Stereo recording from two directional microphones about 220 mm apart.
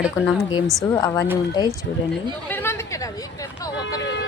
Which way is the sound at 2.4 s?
10° left (ahead or behind).